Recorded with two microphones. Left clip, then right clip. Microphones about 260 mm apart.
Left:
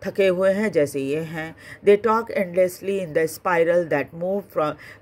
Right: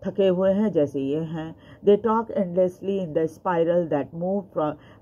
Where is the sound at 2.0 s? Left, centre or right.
Left.